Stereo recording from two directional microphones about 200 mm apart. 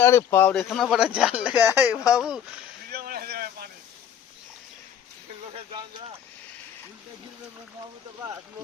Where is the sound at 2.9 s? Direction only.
50° right (ahead or behind).